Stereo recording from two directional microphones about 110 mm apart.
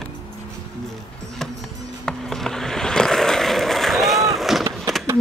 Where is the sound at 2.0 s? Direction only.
5° left (ahead or behind).